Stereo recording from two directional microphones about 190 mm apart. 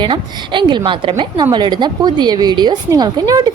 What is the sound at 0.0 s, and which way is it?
A woman's voice, 25° right (ahead or behind).